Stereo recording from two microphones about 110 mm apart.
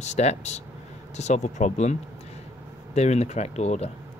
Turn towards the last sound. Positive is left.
turn(degrees=85)